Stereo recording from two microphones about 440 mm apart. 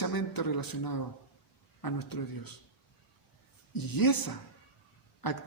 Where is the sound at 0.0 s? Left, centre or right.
Left.